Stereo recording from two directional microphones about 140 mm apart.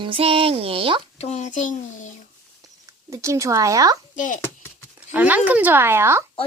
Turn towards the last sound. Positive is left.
turn(degrees=-15)  # may be behind; listen again after turning